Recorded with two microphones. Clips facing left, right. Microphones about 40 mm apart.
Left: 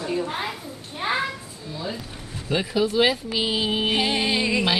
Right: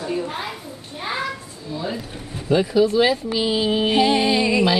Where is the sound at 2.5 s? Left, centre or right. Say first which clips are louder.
Right 6 dB; centre.